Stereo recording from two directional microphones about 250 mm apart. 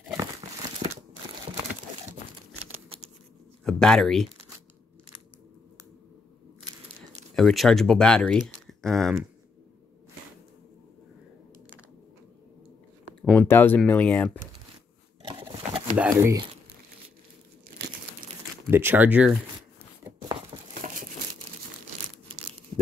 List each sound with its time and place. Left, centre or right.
3.6 s speech: centre
7.3 s speech: centre
13.2 s speech: centre
15.2 s a sound: centre
16.0 s speech: centre
18.7 s speech: centre
20.2 s crumpling: right